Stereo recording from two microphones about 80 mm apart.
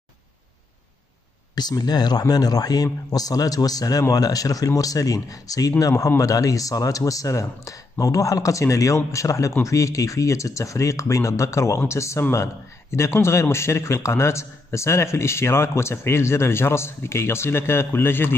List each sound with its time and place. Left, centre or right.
1.5 s a man's voice: left